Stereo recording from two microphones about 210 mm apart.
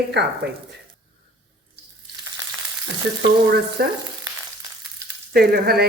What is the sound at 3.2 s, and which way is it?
Speech, 55° right (ahead or behind).